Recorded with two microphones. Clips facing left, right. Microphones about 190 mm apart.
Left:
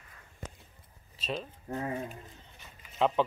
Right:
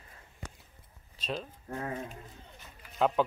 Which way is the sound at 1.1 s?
Centre (ahead or behind).